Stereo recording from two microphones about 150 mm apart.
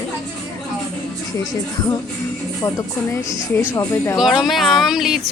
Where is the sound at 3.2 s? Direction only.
20° left (ahead or behind).